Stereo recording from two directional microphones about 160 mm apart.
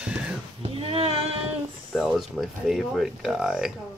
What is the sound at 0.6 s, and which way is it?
Speech, 35° right (ahead or behind).